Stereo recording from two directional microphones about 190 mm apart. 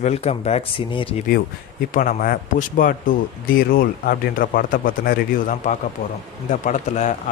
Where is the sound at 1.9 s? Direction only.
45° left (ahead or behind).